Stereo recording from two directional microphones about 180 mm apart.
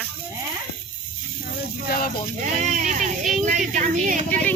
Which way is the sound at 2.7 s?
45° right (ahead or behind).